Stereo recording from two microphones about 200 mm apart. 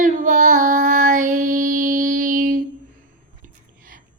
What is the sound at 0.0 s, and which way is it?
Child singing, 40° right (ahead or behind).